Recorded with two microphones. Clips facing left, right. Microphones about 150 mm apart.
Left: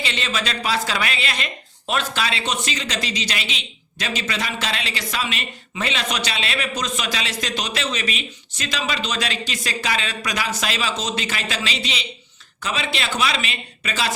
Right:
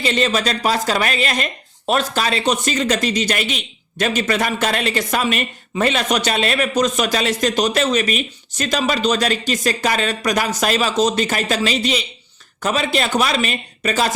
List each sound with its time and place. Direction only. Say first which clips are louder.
0.0 s a man's voice: right 8 dB; 45° right (ahead or behind)